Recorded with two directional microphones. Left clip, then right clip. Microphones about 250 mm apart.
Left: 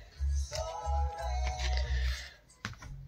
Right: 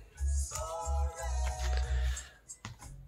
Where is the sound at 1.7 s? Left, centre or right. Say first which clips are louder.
Left 2 dB; right.